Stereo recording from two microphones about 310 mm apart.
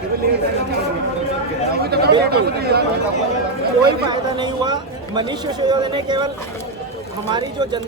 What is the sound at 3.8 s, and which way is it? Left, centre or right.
Speech, centre.